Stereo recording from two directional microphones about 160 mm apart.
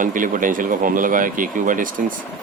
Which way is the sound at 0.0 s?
55° right (ahead or behind).